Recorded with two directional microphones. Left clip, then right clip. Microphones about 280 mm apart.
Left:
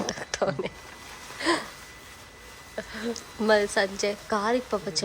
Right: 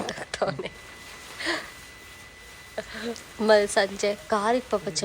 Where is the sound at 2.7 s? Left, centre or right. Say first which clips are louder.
Even; centre.